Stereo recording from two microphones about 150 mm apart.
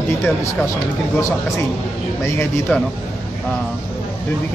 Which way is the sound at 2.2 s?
15° left (ahead or behind).